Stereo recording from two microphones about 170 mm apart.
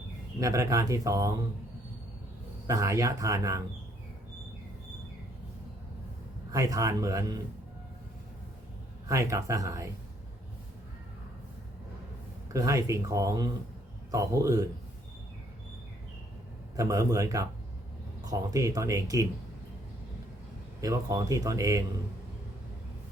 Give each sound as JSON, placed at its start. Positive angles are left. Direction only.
{"t": 0.3, "sound": "speech", "side_deg": -20}
{"t": 2.6, "sound": "speech", "side_deg": -20}
{"t": 6.5, "sound": "speech", "side_deg": -20}
{"t": 9.0, "sound": "speech", "side_deg": -20}
{"t": 12.5, "sound": "speech", "side_deg": -20}
{"t": 16.7, "sound": "speech", "side_deg": -20}
{"t": 20.8, "sound": "speech", "side_deg": -20}